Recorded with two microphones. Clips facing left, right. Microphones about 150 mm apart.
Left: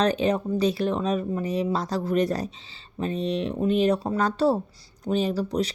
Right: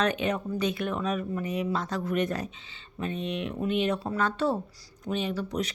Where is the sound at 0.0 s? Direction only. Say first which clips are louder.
Left 5 dB; 35° left (ahead or behind).